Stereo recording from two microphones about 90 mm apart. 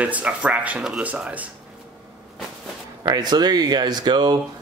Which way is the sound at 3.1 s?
50° right (ahead or behind).